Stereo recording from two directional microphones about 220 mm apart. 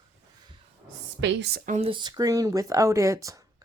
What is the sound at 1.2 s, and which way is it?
Speech, 45° right (ahead or behind).